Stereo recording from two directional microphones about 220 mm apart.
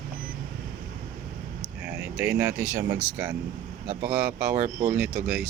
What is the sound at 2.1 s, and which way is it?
Speech, 10° right (ahead or behind).